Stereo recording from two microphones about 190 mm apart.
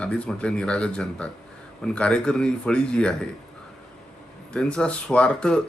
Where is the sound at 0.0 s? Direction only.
5° left (ahead or behind).